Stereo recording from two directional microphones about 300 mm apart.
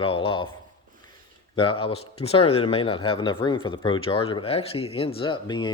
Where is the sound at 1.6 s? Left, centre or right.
Centre.